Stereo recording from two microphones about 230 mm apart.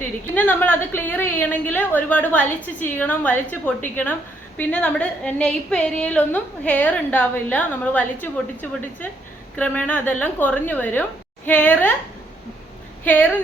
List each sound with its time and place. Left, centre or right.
0.3 s a woman's voice: centre
9.6 s a woman's voice: centre
13.1 s a woman's voice: centre